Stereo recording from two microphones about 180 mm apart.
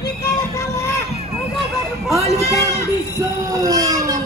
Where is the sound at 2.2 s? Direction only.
15° left (ahead or behind).